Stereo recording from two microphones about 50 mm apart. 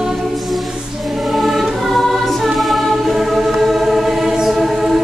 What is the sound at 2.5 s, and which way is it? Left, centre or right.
Choir, centre.